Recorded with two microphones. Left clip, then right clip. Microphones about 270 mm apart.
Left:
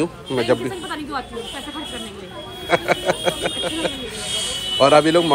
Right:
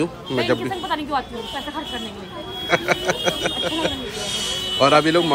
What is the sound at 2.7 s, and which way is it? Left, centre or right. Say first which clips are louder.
Speech: left 1 dB; centre.